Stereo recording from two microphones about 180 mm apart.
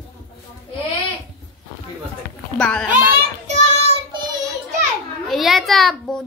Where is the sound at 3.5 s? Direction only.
40° right (ahead or behind).